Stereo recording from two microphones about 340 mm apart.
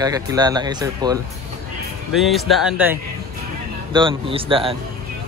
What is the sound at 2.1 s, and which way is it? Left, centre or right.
Speech, centre.